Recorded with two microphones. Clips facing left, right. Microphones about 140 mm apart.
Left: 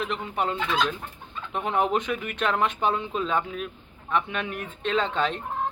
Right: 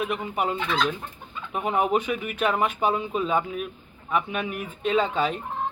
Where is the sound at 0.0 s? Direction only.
10° right (ahead or behind).